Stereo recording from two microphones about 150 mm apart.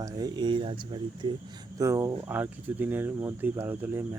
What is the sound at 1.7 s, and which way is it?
Speech, 20° right (ahead or behind).